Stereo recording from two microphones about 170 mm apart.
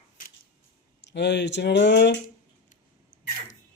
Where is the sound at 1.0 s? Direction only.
90° left.